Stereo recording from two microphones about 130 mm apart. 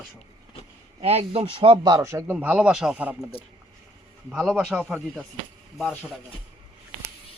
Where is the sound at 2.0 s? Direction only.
20° right (ahead or behind).